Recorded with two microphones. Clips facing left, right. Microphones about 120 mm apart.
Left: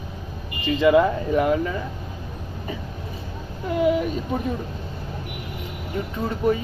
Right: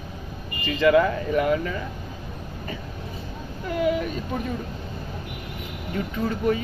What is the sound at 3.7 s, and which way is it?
Speech, 20° left (ahead or behind).